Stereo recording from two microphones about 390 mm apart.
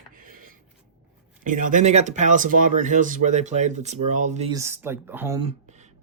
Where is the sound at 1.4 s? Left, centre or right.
Centre.